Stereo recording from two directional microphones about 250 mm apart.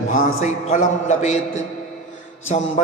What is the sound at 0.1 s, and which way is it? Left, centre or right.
Mantra, left.